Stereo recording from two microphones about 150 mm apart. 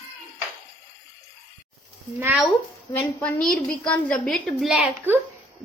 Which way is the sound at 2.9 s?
5° left (ahead or behind).